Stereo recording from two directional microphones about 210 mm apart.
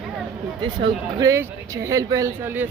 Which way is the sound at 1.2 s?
15° right (ahead or behind).